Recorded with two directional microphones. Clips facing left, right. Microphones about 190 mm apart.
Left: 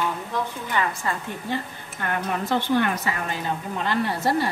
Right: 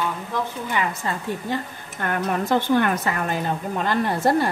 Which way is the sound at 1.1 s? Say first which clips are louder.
Even; 25° right (ahead or behind).